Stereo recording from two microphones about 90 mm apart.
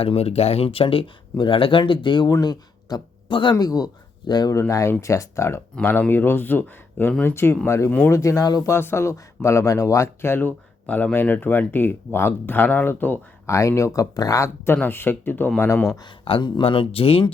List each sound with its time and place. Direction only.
0.0 s speech: 90° left
1.9 s speech: 60° left (ahead or behind)
2.4 s a sound: 50° left (ahead or behind)
3.3 s speech: 65° left (ahead or behind)
3.6 s speech: 40° left (ahead or behind)
4.3 s speech: 55° left (ahead or behind)
4.7 s speech: 35° left (ahead or behind); by 8.1 s 20° left (ahead or behind)
8.1 s speech: 35° left (ahead or behind)
8.7 s speech: 30° left (ahead or behind)
13.5 s speech: 35° left (ahead or behind)
16.2 s speech: 80° left